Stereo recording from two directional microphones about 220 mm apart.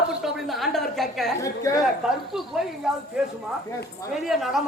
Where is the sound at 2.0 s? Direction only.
5° right (ahead or behind).